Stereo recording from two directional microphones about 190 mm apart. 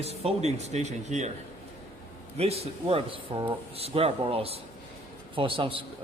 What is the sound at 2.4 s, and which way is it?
Speech, 30° right (ahead or behind).